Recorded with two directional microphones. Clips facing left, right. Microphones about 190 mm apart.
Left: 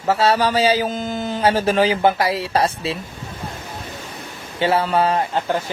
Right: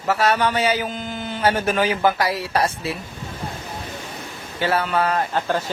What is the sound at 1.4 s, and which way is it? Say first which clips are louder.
Speech: left 3 dB; 30° left (ahead or behind).